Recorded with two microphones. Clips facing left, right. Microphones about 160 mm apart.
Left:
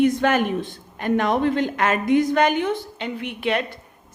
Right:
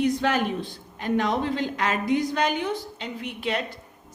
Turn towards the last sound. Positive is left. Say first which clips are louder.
# left 5 dB
turn(degrees=65)  # may be behind; listen again after turning